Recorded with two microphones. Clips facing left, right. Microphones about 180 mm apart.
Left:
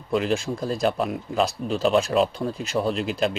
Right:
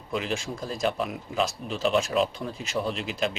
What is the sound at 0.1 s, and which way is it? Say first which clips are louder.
Speech: left 7 dB; 40° left (ahead or behind).